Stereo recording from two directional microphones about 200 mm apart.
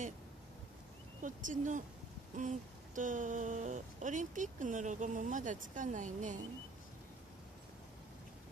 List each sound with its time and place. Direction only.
1.2 s speech: 40° right (ahead or behind)